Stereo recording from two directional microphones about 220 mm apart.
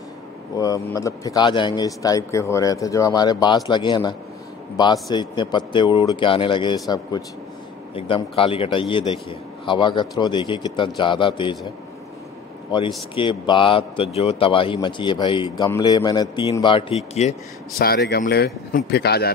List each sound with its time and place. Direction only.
0.6 s speech: 15° left (ahead or behind)
5.1 s a man's voice: 20° left (ahead or behind)
12.7 s a man's voice: 20° left (ahead or behind)
17.7 s speech: 45° left (ahead or behind)